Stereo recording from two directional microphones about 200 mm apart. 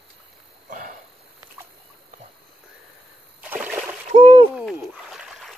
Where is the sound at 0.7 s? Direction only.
40° right (ahead or behind).